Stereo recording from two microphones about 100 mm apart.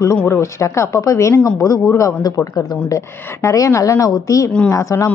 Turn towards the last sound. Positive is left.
turn(degrees=35)  # may be behind; listen again after turning